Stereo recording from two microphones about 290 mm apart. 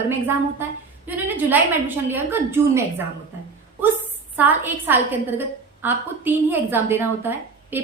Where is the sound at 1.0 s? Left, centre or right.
Centre.